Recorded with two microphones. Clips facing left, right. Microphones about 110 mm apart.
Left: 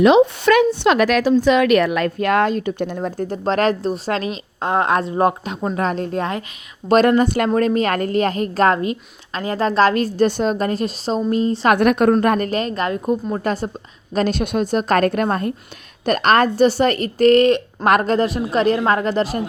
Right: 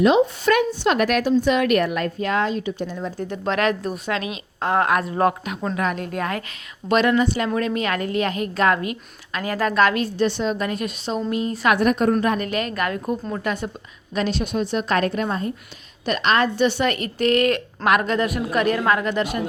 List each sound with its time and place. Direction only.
0.0 s speech: 85° left; by 4.4 s 35° left (ahead or behind)
4.6 s a woman's voice: 20° left (ahead or behind)
6.8 s a woman's voice: 40° left (ahead or behind)
11.8 s a woman's voice: 65° left (ahead or behind)
12.4 s speech: 35° left (ahead or behind)
13.3 s a woman's voice: 35° left (ahead or behind)